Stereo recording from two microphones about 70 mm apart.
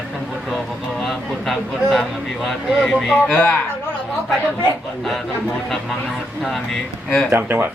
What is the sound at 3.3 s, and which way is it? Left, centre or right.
Speech, left.